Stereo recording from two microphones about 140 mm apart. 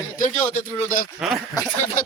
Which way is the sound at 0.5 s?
75° left (ahead or behind).